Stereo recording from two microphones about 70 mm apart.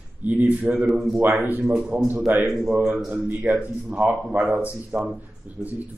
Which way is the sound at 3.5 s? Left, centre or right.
Centre.